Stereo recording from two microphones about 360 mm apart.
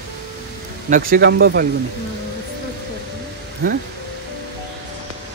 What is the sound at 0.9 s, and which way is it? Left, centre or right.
Speech, right.